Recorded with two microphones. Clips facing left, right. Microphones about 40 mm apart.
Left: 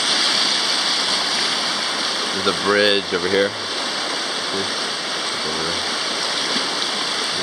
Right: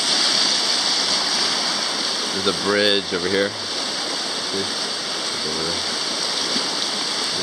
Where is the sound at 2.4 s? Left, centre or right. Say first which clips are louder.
Left 2 dB; centre.